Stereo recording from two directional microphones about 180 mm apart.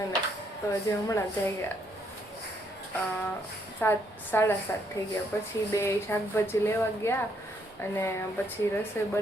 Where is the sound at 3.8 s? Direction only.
10° left (ahead or behind).